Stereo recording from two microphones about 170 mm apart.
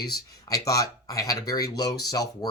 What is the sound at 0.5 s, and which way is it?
Speech, 20° left (ahead or behind).